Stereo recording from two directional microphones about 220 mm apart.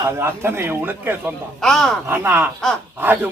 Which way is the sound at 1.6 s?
Centre (ahead or behind).